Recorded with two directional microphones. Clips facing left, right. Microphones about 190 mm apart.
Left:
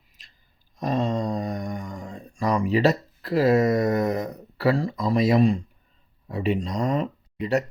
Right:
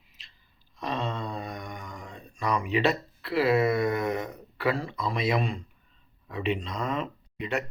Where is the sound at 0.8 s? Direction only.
45° left (ahead or behind).